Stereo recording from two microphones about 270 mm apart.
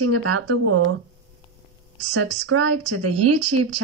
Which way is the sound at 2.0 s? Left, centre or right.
Right.